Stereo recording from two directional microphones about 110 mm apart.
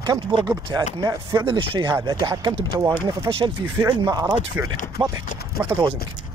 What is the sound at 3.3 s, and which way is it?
Speech, 30° right (ahead or behind).